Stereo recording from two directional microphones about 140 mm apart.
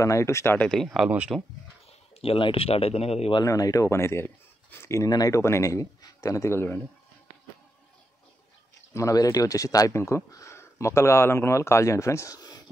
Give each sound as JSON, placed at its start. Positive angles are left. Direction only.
{"t": 0.0, "sound": "speech", "side_deg": 20}
{"t": 0.7, "sound": "speech", "side_deg": 0}
{"t": 1.9, "sound": "speech", "side_deg": 40}
{"t": 3.3, "sound": "speech", "side_deg": 25}
{"t": 8.9, "sound": "speech", "side_deg": 25}